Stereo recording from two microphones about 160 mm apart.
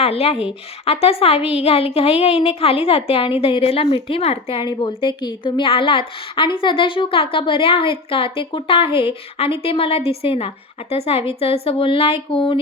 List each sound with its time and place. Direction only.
0.0 s a woman's voice: 40° left (ahead or behind)